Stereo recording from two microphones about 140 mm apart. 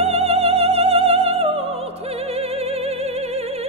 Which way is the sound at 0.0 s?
45° right (ahead or behind).